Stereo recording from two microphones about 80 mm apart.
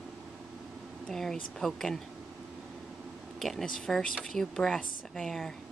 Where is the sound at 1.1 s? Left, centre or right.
Centre.